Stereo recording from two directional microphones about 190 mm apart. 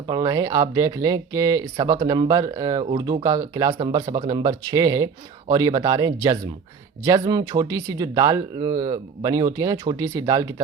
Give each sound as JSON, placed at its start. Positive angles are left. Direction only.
{"t": 0.1, "sound": "speech", "side_deg": -20}